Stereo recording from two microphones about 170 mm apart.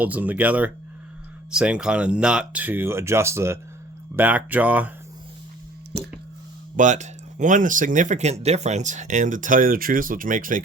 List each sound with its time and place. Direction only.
0.0 s speech: 10° right (ahead or behind)
6.7 s speech: 45° right (ahead or behind)